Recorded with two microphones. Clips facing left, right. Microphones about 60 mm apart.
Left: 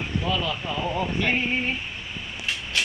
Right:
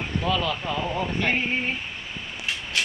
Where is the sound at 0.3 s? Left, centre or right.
Right.